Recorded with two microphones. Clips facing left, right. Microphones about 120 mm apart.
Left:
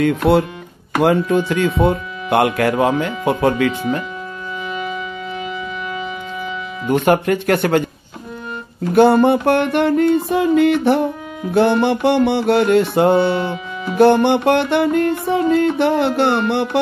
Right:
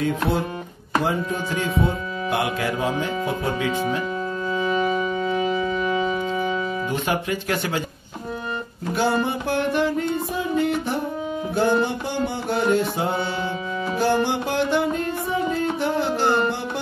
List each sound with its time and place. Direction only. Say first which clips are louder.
0.0 s speech: left 8 dB; 70° left (ahead or behind)
4.6 s music: right 4 dB; 40° right (ahead or behind)
6.9 s music: left 14 dB; 60° left (ahead or behind)
8.9 s music: left 11 dB; 60° left (ahead or behind)
11.5 s speech: left 7 dB; 70° left (ahead or behind)
13.9 s music: left 10 dB; 65° left (ahead or behind)